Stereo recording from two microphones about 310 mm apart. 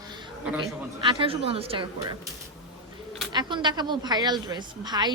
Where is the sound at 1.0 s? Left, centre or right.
Centre.